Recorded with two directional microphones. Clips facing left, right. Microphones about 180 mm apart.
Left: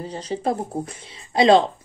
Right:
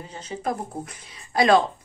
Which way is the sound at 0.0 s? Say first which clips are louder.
Left 5 dB; 35° left (ahead or behind).